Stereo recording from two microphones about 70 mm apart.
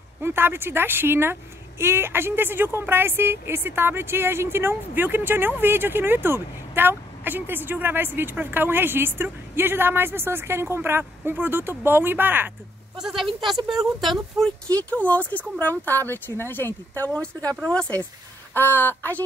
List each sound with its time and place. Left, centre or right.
0.2 s speech: right
12.9 s speech: centre
15.0 s speech: left
17.6 s speech: centre
18.5 s speech: left